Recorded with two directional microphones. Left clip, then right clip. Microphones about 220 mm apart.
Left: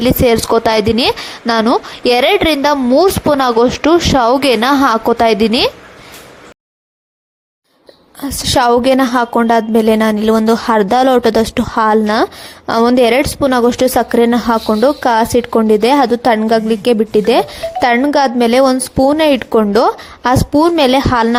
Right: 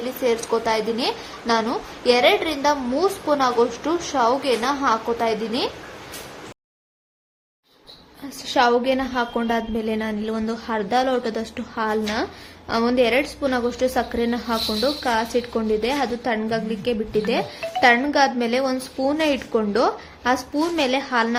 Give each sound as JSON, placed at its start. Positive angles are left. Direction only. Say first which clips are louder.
{"t": 0.3, "sound": "a woman's voice", "louder": "left 7 dB", "side_deg": 45}
{"t": 8.2, "sound": "a woman's voice", "louder": "left 7 dB", "side_deg": 45}